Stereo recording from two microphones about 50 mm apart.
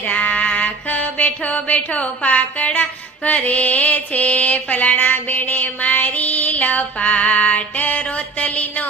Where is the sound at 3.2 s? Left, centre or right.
Left.